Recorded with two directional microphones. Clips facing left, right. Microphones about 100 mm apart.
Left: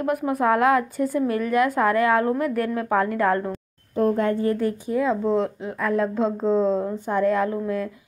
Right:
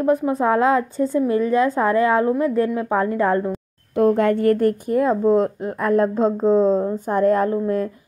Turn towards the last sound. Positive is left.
turn(degrees=-40)  # may be behind; listen again after turning